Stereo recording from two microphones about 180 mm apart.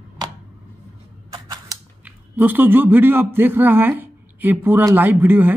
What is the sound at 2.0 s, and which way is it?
A man's voice, 10° right (ahead or behind).